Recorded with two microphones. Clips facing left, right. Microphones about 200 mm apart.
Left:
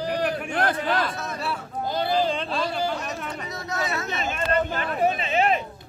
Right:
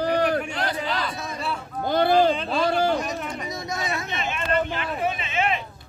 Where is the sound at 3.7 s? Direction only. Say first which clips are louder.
Left 2 dB; 15° right (ahead or behind).